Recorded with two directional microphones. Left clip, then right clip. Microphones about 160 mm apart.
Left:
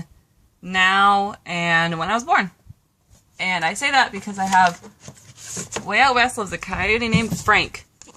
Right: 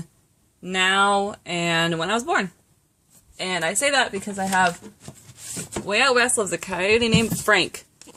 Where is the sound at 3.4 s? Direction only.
45° right (ahead or behind).